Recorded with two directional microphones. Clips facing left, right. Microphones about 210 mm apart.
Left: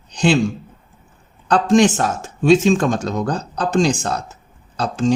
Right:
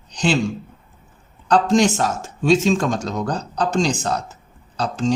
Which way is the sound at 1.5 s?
50° left (ahead or behind).